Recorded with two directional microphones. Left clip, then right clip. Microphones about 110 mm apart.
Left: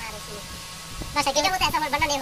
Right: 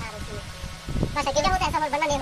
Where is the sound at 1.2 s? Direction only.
5° left (ahead or behind).